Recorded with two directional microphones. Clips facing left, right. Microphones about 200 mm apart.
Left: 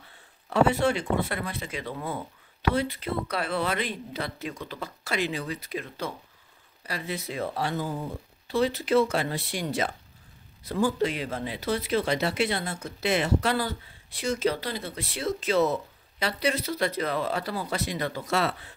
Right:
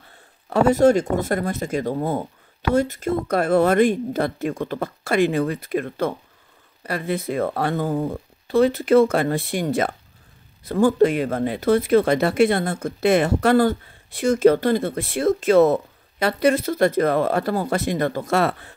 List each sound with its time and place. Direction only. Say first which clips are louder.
0.1 s speech: right 5 dB; 45° right (ahead or behind)